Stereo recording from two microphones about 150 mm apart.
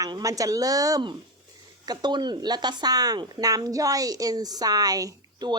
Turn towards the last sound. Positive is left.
turn(degrees=-25)  # may be behind; listen again after turning